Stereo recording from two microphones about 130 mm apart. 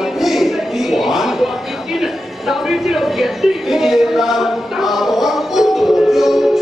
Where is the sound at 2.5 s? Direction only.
Centre (ahead or behind).